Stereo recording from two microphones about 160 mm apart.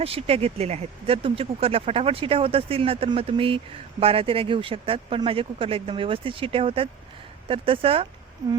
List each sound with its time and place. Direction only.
0.0 s speech: 35° right (ahead or behind)